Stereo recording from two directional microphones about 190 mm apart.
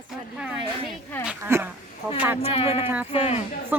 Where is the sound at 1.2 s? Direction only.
10° right (ahead or behind).